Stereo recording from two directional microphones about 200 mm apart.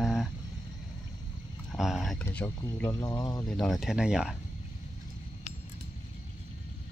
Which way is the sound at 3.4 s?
5° left (ahead or behind).